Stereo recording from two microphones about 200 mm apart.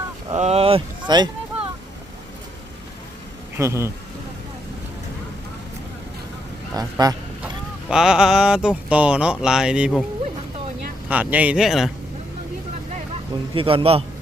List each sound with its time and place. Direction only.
0.3 s speech: 30° right (ahead or behind)
3.6 s speech: 15° right (ahead or behind)
6.7 s speech: 20° right (ahead or behind)
7.4 s speech: 5° right (ahead or behind)
11.1 s speech: 5° right (ahead or behind)
13.5 s speech: 25° right (ahead or behind)